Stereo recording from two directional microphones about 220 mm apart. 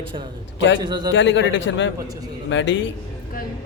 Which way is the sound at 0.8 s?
20° right (ahead or behind).